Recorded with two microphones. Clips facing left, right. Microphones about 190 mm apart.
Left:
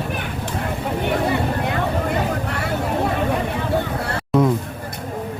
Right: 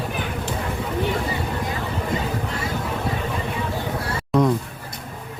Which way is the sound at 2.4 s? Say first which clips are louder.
Left 2 dB; 65° left (ahead or behind).